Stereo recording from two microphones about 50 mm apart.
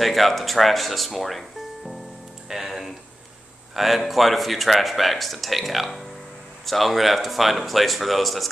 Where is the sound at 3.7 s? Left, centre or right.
Centre.